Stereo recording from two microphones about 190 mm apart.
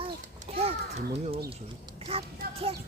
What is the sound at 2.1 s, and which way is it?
Speech, 30° right (ahead or behind).